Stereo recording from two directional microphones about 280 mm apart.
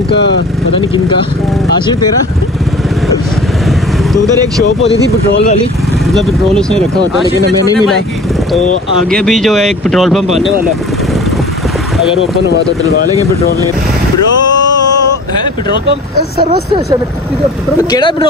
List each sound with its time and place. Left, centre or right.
0.1 s speech: left
6.0 s speech: centre
9.1 s speech: centre